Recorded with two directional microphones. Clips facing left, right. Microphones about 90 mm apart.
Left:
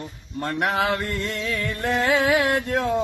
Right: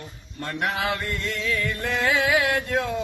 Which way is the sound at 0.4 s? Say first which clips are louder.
Left 3 dB; 40° left (ahead or behind).